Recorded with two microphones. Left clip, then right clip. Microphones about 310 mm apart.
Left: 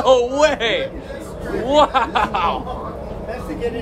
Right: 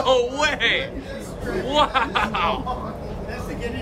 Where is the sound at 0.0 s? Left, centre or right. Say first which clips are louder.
Left 5 dB; centre.